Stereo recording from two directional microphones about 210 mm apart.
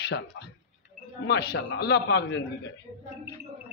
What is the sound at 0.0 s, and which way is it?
A man's voice, 50° left (ahead or behind).